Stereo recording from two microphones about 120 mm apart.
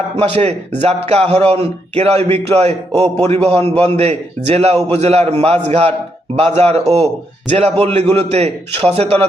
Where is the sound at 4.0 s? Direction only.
65° right (ahead or behind).